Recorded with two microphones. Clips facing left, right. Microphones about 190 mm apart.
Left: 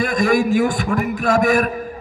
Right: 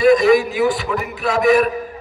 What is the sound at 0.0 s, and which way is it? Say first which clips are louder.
A man's voice: right 5 dB; 50° left (ahead or behind).